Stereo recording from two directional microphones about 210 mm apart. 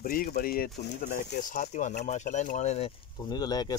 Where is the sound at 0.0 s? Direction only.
45° left (ahead or behind).